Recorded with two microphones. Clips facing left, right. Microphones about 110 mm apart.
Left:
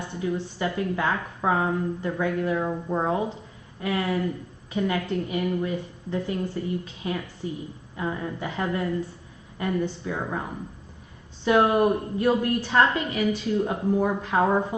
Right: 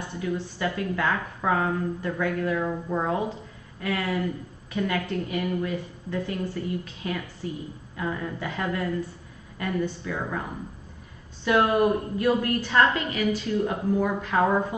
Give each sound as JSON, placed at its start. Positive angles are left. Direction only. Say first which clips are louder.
{"t": 0.2, "sound": "a woman's voice", "louder": "left 1 dB", "side_deg": 25}
{"t": 11.4, "sound": "a woman's voice", "louder": "left 1 dB", "side_deg": 20}